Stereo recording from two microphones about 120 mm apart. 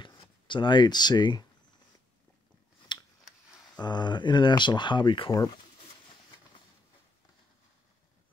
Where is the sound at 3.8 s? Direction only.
40° left (ahead or behind).